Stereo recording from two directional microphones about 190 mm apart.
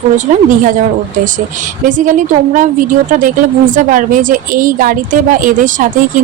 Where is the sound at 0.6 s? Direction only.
45° right (ahead or behind).